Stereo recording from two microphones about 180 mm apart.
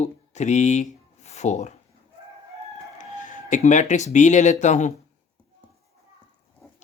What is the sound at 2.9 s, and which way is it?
Speech, 45° left (ahead or behind).